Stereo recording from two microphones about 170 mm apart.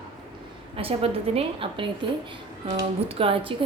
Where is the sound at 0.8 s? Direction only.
35° right (ahead or behind).